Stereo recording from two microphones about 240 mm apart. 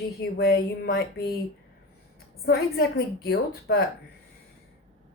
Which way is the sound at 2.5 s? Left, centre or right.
Left.